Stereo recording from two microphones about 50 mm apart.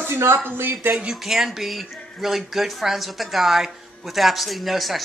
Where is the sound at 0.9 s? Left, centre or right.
Centre.